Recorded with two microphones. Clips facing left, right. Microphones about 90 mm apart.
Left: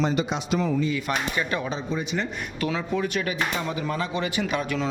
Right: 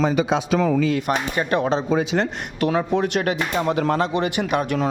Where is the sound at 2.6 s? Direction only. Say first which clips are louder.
Right 6 dB; 60° right (ahead or behind).